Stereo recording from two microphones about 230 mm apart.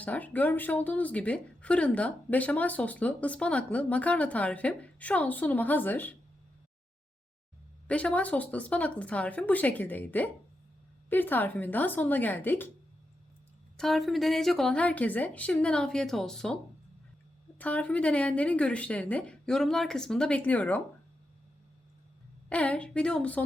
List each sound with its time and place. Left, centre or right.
0.0 s speech: centre
7.9 s speech: centre
13.7 s a woman's voice: centre
17.6 s a woman's voice: centre
22.4 s a woman's voice: centre